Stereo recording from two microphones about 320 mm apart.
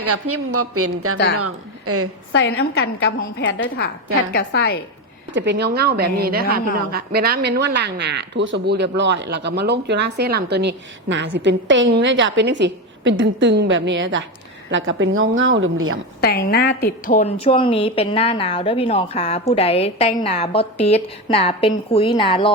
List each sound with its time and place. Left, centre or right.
0.0 s a woman's voice: right
2.3 s a woman's voice: left
5.3 s speech: right
16.2 s a woman's voice: left